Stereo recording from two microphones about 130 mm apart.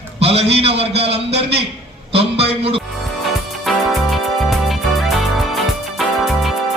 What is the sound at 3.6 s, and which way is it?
Music, centre (ahead or behind).